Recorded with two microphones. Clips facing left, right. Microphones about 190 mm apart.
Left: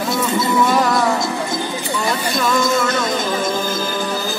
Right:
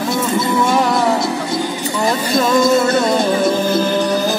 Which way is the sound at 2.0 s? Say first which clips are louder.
Right 5 dB; 25° right (ahead or behind).